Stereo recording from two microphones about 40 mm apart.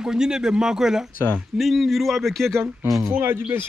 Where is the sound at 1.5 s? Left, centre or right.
Centre.